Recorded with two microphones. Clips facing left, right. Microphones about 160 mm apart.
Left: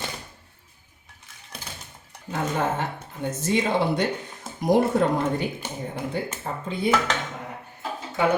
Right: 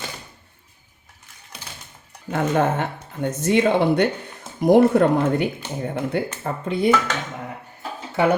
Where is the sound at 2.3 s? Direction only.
60° right (ahead or behind).